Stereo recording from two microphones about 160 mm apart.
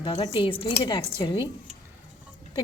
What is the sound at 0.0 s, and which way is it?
A woman's voice, 30° left (ahead or behind).